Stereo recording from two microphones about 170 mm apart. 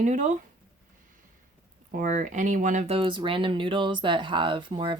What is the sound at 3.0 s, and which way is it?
Speech, 30° right (ahead or behind).